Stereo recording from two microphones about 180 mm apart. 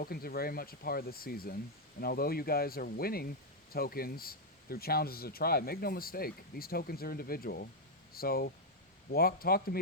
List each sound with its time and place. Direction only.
0.0 s speech: 55° left (ahead or behind)